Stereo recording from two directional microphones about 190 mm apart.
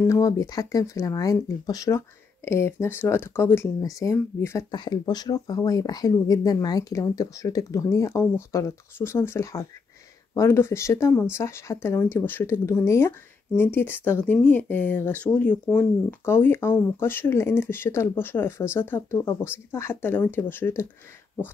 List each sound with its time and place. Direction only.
0.0 s speech: 15° left (ahead or behind)